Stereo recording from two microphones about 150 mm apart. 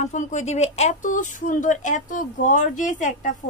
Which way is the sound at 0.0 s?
55° left (ahead or behind).